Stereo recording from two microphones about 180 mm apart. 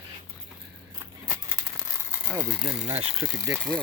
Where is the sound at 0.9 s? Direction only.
20° right (ahead or behind).